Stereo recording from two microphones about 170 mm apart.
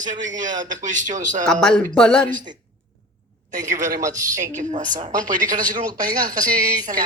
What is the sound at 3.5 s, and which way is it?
Speech, 50° right (ahead or behind).